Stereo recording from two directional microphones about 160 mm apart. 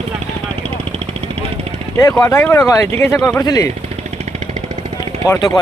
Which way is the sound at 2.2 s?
15° left (ahead or behind).